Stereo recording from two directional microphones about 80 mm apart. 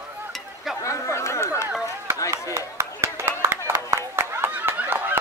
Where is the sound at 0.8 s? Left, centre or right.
Left.